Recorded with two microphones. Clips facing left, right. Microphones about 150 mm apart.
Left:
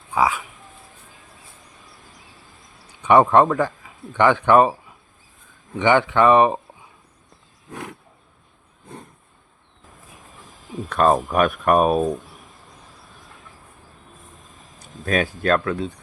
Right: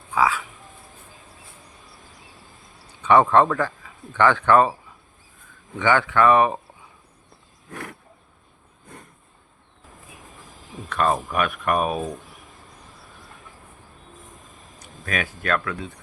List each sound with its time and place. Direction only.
0.1 s speech: 20° left (ahead or behind)
3.0 s speech: 15° left (ahead or behind)
5.8 s speech: 20° left (ahead or behind)
7.7 s roaring cats: 20° left (ahead or behind)
10.8 s speech: 40° left (ahead or behind)
15.0 s speech: 30° left (ahead or behind)